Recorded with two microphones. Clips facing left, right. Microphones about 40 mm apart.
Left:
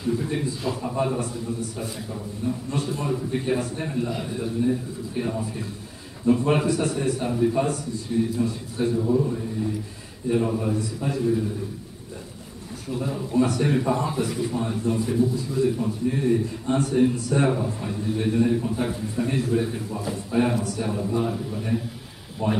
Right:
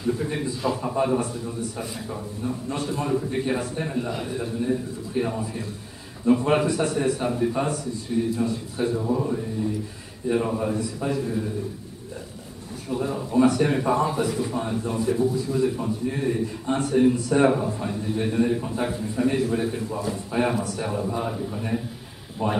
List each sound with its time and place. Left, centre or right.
0.0 s a man's voice: centre
2.4 s a man's voice: centre
8.9 s a man's voice: right
12.9 s a man's voice: centre